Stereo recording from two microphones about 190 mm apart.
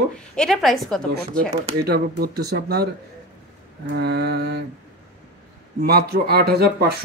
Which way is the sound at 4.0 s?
60° right (ahead or behind).